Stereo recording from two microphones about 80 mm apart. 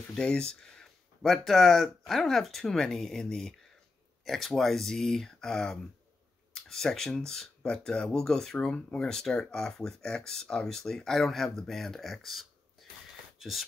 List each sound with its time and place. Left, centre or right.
0.1 s speech: centre